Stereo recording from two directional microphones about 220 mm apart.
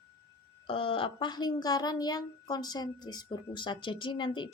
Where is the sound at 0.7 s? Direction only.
25° left (ahead or behind).